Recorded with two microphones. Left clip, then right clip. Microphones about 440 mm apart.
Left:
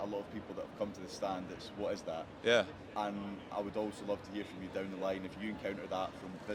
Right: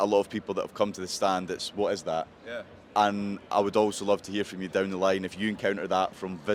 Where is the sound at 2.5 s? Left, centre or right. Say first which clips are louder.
Left 8 dB; left.